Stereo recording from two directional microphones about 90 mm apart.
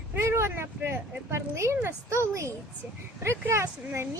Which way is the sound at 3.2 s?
30° right (ahead or behind).